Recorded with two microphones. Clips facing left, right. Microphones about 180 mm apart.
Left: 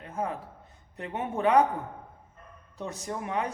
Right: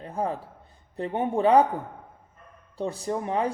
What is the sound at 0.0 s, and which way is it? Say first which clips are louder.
Speech: right 4 dB; 35° right (ahead or behind).